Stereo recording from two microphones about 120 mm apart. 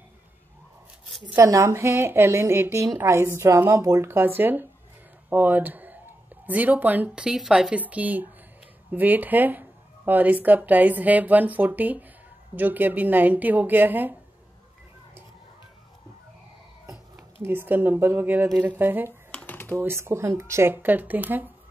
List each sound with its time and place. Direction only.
1.3 s speech: 25° right (ahead or behind)
16.8 s speech: 25° right (ahead or behind)
19.0 s computer keyboard: 15° left (ahead or behind)
19.8 s speech: 20° right (ahead or behind)